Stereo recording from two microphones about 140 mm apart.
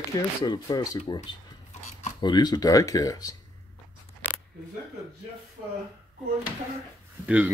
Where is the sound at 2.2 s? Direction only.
30° left (ahead or behind).